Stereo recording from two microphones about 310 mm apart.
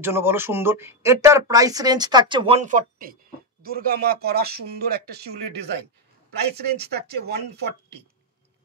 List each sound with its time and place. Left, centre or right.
0.0 s speech: centre; by 8.0 s right